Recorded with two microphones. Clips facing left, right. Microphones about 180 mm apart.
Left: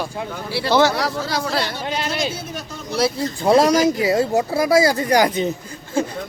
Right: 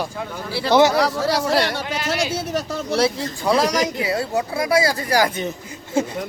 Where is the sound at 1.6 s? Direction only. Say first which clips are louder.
Right 2 dB; 70° right (ahead or behind).